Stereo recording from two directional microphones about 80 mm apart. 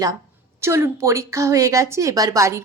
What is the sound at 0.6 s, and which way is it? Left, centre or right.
A woman's voice, right.